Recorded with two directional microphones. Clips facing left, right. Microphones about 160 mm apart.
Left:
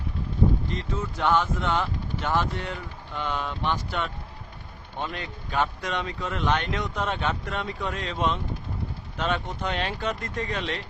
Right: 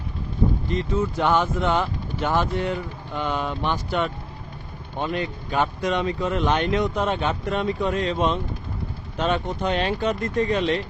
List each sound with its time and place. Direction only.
0.8 s speech: 10° right (ahead or behind)